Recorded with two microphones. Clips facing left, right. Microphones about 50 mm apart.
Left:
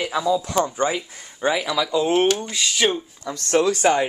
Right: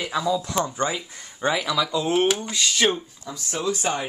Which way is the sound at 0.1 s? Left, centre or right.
Centre.